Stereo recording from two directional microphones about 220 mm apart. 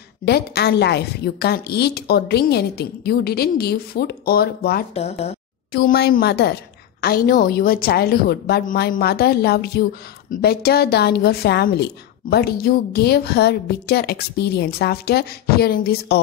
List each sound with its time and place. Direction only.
0.2 s a woman's voice: 45° left (ahead or behind)
4.9 s speech: 30° left (ahead or behind)
5.7 s a woman's voice: 45° left (ahead or behind)